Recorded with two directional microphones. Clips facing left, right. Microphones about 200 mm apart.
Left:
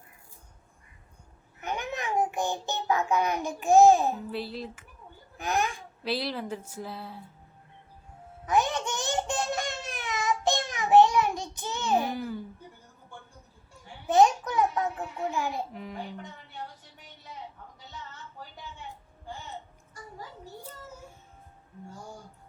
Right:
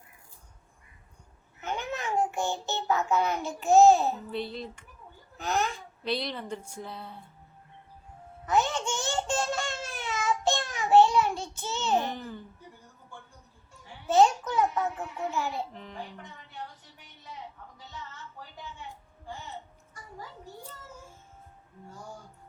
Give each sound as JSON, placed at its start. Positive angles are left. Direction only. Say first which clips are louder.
{"t": 1.6, "sound": "a child's voice", "louder": "even", "side_deg": 15}
{"t": 4.3, "sound": "speech", "louder": "even", "side_deg": 5}
{"t": 5.4, "sound": "a child's voice", "louder": "left 1 dB", "side_deg": 15}
{"t": 6.1, "sound": "speech", "louder": "left 1 dB", "side_deg": 5}
{"t": 8.4, "sound": "babbling", "louder": "even", "side_deg": 15}
{"t": 14.1, "sound": "babbling", "louder": "left 1 dB", "side_deg": 15}
{"t": 15.3, "sound": "a child's voice", "louder": "left 1 dB", "side_deg": 15}